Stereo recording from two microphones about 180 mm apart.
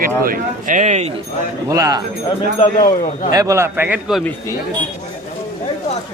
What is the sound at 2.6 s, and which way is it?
Speech, 40° left (ahead or behind).